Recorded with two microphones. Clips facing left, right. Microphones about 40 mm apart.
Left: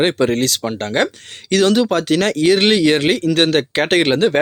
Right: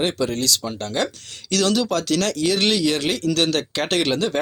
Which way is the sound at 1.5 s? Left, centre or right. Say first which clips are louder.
Left 6 dB; left.